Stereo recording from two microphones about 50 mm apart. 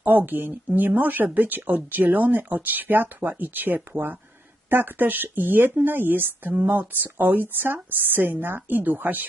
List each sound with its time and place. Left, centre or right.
0.0 s speech: right